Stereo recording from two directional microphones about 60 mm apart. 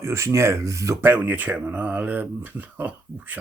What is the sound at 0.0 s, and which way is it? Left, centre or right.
Speech, right.